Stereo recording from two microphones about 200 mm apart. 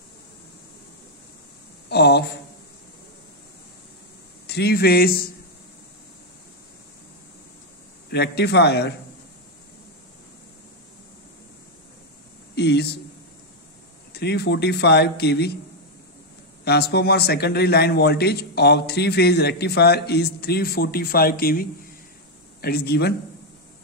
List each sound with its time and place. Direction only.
1.9 s speech: 55° left (ahead or behind)
4.5 s a man's voice: 55° left (ahead or behind)
8.1 s speech: 55° left (ahead or behind)
12.5 s speech: 55° left (ahead or behind)
14.1 s speech: 55° left (ahead or behind)
16.6 s a man's voice: 55° left (ahead or behind)